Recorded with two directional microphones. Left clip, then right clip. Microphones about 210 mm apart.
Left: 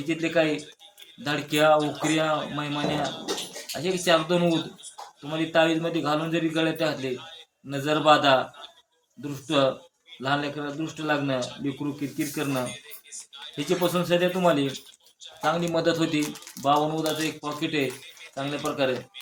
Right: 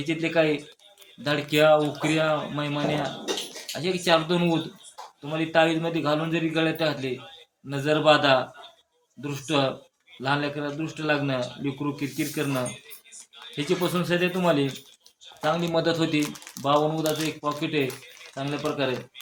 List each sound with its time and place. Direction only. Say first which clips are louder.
0.0 s a man's voice: right 1 dB; 5° right (ahead or behind)
13.7 s a man's voice: left 2 dB; 5° right (ahead or behind)